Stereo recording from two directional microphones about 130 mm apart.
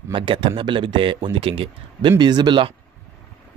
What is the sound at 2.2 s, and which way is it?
Speech, 35° right (ahead or behind).